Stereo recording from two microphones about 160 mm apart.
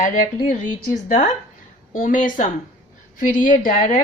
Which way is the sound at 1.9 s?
55° left (ahead or behind).